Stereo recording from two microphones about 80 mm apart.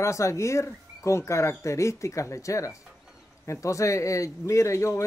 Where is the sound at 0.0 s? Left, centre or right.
Left.